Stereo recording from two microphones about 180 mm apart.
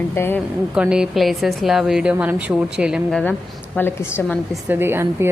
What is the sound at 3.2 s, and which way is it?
A woman's voice, 10° left (ahead or behind).